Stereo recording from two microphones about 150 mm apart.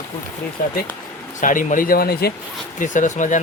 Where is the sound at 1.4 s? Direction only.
60° left (ahead or behind); by 2.3 s 90° left.